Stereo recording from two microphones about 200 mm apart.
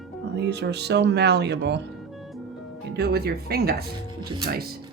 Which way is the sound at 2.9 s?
55° right (ahead or behind).